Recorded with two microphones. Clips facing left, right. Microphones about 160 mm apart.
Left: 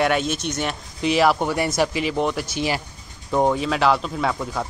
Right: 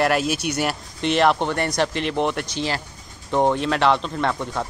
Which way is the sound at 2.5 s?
10° left (ahead or behind).